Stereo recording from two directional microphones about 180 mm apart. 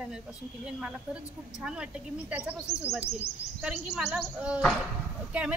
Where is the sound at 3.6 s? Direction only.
5° right (ahead or behind).